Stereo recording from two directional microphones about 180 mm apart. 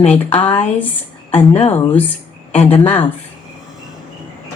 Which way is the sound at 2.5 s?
35° left (ahead or behind).